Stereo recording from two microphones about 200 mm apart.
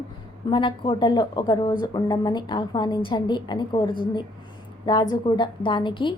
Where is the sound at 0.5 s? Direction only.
25° left (ahead or behind).